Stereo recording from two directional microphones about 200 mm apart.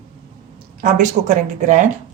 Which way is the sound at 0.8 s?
40° right (ahead or behind).